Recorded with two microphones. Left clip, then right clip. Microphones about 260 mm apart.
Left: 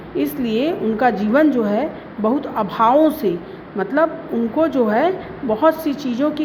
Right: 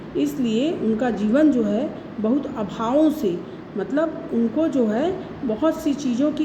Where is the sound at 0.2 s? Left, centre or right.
Centre.